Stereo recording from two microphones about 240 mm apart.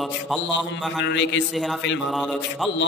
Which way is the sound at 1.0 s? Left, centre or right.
Left.